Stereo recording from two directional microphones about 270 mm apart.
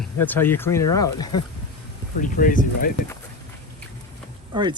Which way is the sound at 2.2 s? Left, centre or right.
Left.